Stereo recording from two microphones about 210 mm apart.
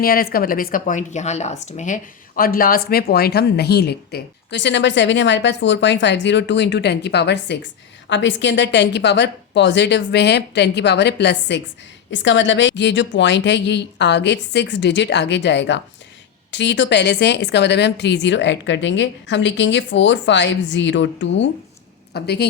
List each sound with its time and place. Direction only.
0.0 s a woman's voice: 45° left (ahead or behind)